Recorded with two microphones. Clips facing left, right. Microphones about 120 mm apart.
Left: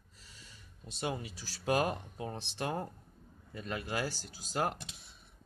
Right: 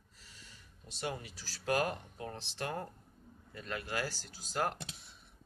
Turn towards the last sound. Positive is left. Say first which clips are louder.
# left 1 dB
turn(degrees=15)  # may be behind; listen again after turning